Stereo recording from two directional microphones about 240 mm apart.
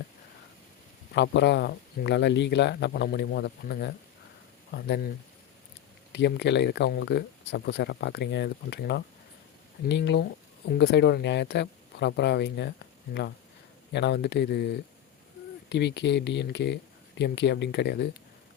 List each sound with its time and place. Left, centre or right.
1.1 s speech: left
6.1 s speech: left
13.9 s speech: left